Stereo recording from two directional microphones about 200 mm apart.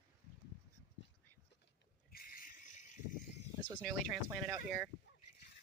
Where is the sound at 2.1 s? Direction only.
45° left (ahead or behind).